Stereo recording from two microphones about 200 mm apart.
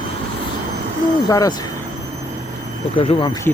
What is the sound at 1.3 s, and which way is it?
Speech, 15° left (ahead or behind).